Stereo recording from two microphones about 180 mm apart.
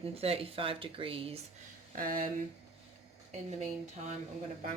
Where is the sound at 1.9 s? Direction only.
50° right (ahead or behind).